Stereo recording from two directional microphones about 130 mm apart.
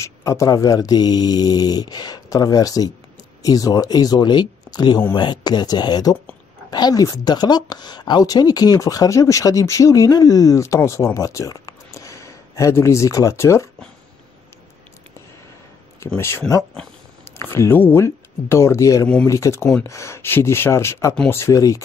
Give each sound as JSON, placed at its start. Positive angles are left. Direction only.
{"t": 0.0, "sound": "a woman's voice", "side_deg": 25}
{"t": 16.2, "sound": "a woman's voice", "side_deg": 20}